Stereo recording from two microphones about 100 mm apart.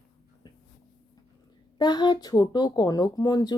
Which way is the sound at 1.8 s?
45° left (ahead or behind).